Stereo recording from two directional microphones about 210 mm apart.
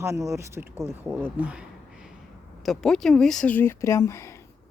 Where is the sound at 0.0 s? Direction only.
15° right (ahead or behind).